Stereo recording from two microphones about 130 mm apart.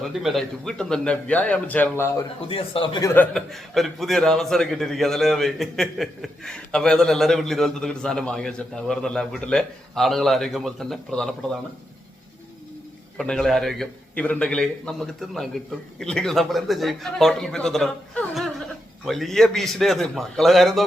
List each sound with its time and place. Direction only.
0.0 s a man's voice: centre (ahead or behind); by 2.2 s 20° left (ahead or behind)
2.5 s speech: 45° left (ahead or behind)
3.3 s a man's voice: centre (ahead or behind)
13.1 s a man's voice: 5° left (ahead or behind)